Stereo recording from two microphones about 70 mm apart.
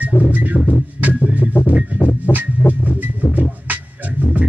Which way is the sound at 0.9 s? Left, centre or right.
Right.